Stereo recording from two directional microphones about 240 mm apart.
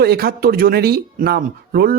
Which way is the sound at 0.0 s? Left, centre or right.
Right.